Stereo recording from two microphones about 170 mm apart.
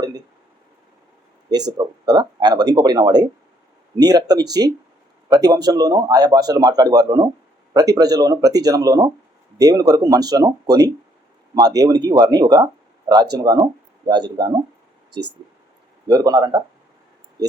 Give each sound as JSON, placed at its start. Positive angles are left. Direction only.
{"t": 1.5, "sound": "a man's voice", "side_deg": -25}
{"t": 16.0, "sound": "a man's voice", "side_deg": -20}